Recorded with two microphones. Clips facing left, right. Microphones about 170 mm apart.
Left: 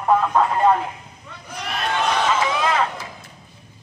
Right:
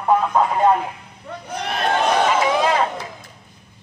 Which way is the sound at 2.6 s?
30° right (ahead or behind).